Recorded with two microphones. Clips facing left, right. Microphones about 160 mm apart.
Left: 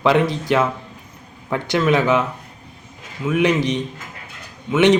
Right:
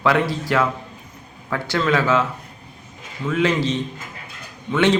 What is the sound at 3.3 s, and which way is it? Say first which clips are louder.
Speech: left 2 dB; 15° left (ahead or behind).